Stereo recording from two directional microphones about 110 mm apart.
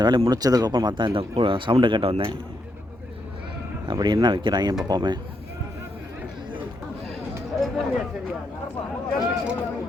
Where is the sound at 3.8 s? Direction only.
40° right (ahead or behind).